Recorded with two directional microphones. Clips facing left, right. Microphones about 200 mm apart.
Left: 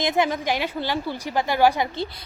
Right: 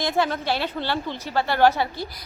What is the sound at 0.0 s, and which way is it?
A woman's voice, 15° left (ahead or behind).